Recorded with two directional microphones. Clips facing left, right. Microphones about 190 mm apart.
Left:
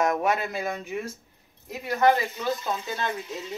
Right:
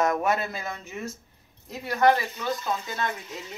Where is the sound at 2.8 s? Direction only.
25° left (ahead or behind).